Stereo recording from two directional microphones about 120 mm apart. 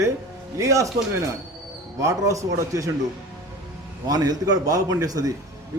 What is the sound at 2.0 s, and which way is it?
Speech, 25° right (ahead or behind).